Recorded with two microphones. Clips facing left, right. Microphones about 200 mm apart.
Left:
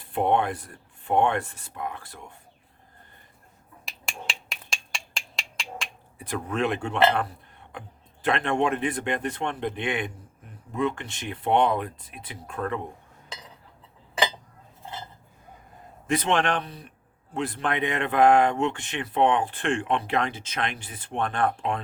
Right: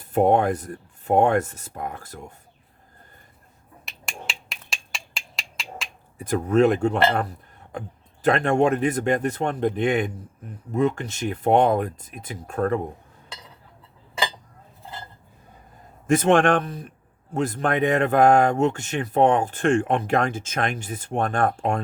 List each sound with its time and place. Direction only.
0.0 s speech: 45° right (ahead or behind)
3.8 s a sound: centre (ahead or behind)
6.1 s speech: 45° right (ahead or behind)
16.0 s speech: 45° right (ahead or behind)